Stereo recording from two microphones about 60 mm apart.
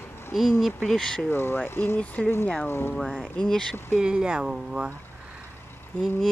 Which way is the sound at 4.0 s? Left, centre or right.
Centre.